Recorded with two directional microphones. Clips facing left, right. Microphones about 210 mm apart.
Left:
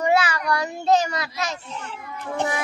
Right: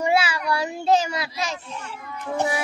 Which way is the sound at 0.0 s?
10° right (ahead or behind).